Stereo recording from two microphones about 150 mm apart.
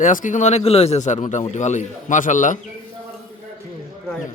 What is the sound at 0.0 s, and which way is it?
Speech, 60° left (ahead or behind).